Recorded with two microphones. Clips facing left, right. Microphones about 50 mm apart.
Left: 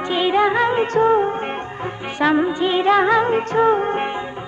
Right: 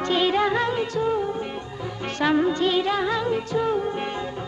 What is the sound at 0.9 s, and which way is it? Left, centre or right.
Music, left.